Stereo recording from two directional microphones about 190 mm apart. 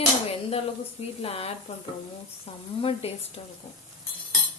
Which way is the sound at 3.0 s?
30° left (ahead or behind).